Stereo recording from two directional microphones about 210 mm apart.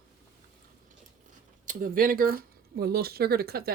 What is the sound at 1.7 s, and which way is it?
Speech, 45° right (ahead or behind).